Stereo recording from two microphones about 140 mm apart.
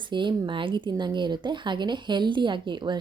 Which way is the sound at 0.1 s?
35° right (ahead or behind).